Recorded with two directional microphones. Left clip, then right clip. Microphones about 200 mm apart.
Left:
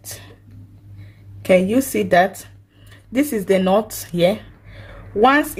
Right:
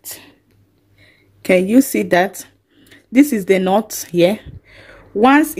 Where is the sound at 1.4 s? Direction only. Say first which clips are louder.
Right 2 dB; 45° right (ahead or behind).